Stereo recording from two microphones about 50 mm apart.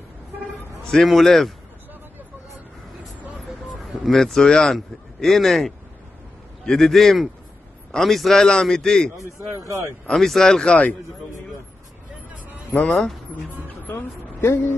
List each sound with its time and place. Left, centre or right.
1.0 s a man's voice: centre
3.4 s a sound: centre
4.0 s a man's voice: centre
10.1 s a man's voice: centre
12.7 s speech: left
13.9 s a woman's voice: left